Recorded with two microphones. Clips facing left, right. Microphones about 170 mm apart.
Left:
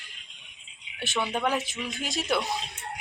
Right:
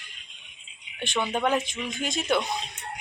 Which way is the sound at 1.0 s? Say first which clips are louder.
Right 2 dB; 5° left (ahead or behind).